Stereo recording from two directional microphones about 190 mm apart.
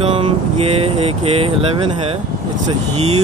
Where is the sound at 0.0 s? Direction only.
30° right (ahead or behind).